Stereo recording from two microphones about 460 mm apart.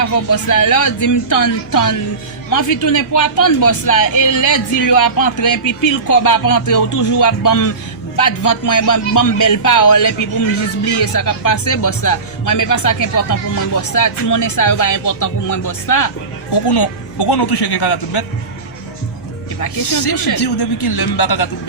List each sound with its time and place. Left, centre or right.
0.0 s speech: left
16.5 s a man's voice: left
19.8 s a man's voice: left